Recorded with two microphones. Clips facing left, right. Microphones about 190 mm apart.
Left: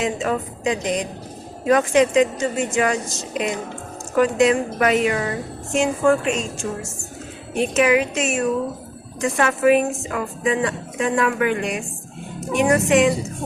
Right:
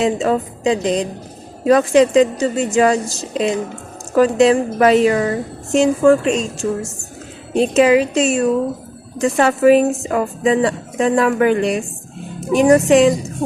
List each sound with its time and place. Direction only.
0.0 s a woman's voice: 35° right (ahead or behind)